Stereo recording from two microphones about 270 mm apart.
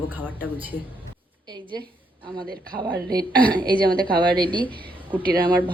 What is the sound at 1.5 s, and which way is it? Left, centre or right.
Speech, centre.